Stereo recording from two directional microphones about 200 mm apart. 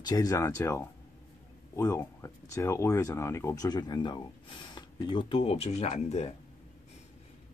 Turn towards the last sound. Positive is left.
turn(degrees=35)  # may be behind; listen again after turning